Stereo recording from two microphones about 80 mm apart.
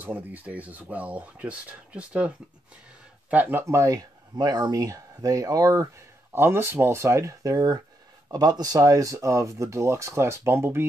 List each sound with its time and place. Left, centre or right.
0.0 s speech: right
4.4 s speech: right
6.3 s speech: right